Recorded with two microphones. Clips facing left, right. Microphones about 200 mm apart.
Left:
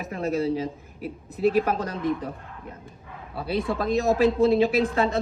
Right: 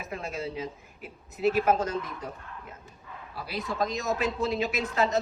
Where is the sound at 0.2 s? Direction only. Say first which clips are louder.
Left 12 dB; 35° left (ahead or behind).